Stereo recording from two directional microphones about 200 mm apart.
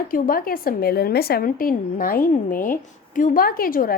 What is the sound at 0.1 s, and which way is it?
A woman's voice, 45° left (ahead or behind).